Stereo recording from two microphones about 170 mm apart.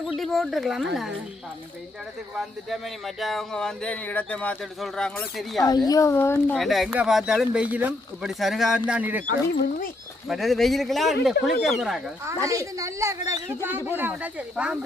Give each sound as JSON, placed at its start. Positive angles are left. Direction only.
{"t": 0.2, "sound": "speech", "side_deg": 0}
{"t": 2.4, "sound": "speech", "side_deg": 0}
{"t": 5.6, "sound": "speech", "side_deg": 20}
{"t": 6.6, "sound": "speech", "side_deg": 0}
{"t": 10.2, "sound": "speech", "side_deg": 0}
{"t": 12.5, "sound": "a woman's voice", "side_deg": -20}